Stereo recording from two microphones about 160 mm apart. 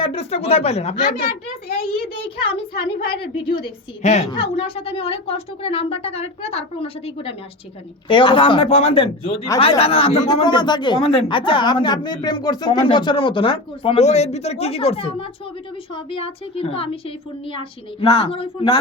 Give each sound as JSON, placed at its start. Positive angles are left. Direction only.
{"t": 0.0, "sound": "a woman's voice", "side_deg": 35}
{"t": 2.4, "sound": "a woman's voice", "side_deg": 35}
{"t": 4.0, "sound": "a woman's voice", "side_deg": 45}
{"t": 10.3, "sound": "a woman's voice", "side_deg": 30}